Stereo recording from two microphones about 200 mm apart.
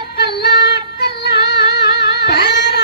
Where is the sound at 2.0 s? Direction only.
55° left (ahead or behind).